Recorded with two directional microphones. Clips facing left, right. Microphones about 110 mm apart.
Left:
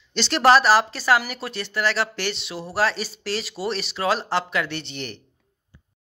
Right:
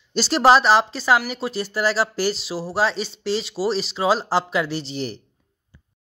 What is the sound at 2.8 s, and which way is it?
Speech, centre (ahead or behind).